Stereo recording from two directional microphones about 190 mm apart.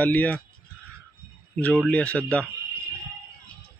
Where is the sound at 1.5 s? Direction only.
5° left (ahead or behind).